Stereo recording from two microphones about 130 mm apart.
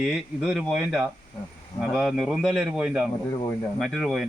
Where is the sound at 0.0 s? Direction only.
5° right (ahead or behind).